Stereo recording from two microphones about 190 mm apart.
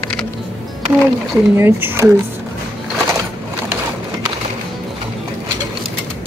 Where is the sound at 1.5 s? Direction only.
10° right (ahead or behind).